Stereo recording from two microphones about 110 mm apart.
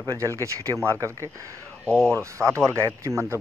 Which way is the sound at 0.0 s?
30° right (ahead or behind).